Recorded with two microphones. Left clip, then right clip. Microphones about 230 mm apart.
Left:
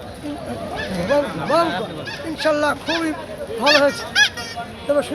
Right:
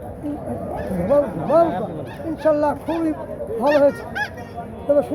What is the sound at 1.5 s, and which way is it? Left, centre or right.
Speech, left.